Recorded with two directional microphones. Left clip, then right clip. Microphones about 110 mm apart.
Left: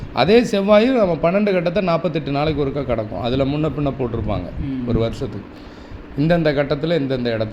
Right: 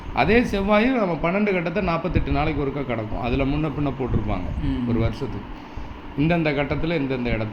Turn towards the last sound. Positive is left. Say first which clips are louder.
# left 5 dB
turn(degrees=55)  # may be behind; listen again after turning